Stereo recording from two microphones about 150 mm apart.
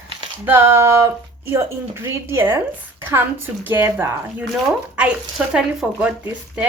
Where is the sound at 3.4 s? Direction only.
15° right (ahead or behind).